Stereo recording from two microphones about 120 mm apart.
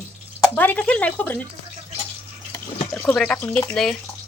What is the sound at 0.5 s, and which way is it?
Speech, 15° left (ahead or behind).